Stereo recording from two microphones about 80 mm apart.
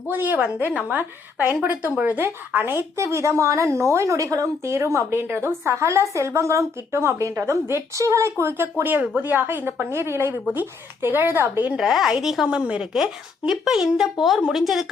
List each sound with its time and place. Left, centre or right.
0.1 s a woman's voice: right
11.7 s speech: centre
12.5 s speech: centre